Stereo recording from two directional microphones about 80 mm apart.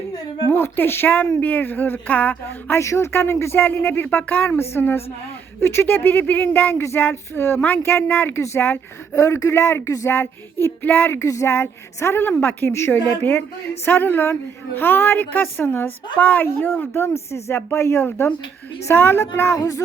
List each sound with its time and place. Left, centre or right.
0.5 s a woman's voice: left
2.8 s a woman's voice: left
9.1 s a woman's voice: left